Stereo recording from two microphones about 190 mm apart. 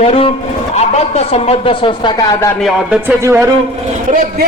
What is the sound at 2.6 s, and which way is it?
Speech, 10° right (ahead or behind).